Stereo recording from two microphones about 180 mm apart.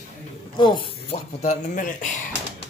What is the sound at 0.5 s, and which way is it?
Speech, 25° left (ahead or behind).